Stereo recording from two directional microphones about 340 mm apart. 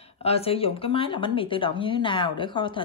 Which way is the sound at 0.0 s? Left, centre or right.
Centre.